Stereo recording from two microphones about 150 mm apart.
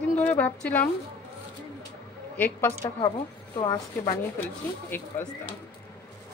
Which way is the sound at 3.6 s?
30° left (ahead or behind).